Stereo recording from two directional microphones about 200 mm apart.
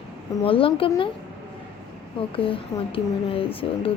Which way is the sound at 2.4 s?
25° left (ahead or behind).